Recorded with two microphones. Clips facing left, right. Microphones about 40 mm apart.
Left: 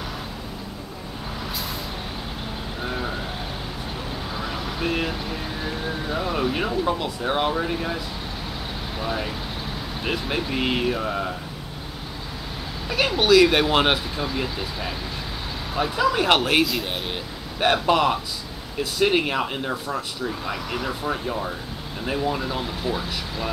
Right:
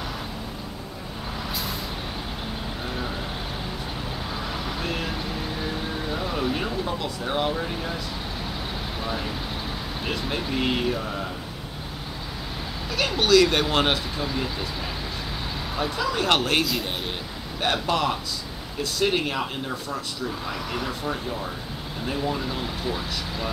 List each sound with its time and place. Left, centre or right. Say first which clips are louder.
2.8 s vehicle: left 4 dB; centre
4.3 s vehicle: left 1 dB; centre
6.9 s speech: left 4 dB; centre
9.0 s speech: left 3 dB; centre
11.0 s speech: left 4 dB; centre
12.8 s speech: left 3 dB; centre
17.6 s speech: left 5 dB; centre
21.1 s speech: left 3 dB; centre